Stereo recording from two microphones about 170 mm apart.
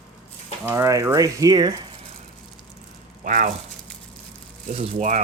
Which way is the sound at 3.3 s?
50° right (ahead or behind).